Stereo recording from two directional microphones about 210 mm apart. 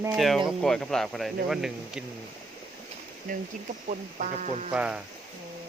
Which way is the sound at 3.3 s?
40° right (ahead or behind).